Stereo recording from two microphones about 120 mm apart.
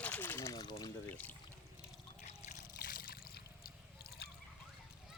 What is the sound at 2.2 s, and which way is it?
Trickle, 70° left (ahead or behind).